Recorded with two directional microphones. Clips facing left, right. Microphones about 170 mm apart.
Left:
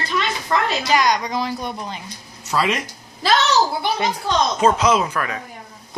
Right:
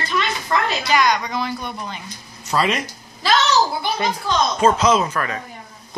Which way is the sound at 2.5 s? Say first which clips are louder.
Right 1 dB; 5° left (ahead or behind).